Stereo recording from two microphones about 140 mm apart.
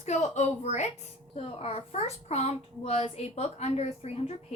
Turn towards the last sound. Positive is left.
turn(degrees=50)  # may be behind; listen again after turning